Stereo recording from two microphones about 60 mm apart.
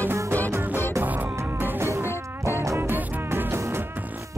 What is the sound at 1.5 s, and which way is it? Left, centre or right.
Music, right.